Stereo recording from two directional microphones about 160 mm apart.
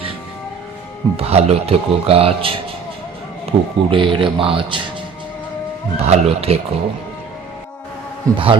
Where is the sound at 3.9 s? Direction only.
30° right (ahead or behind).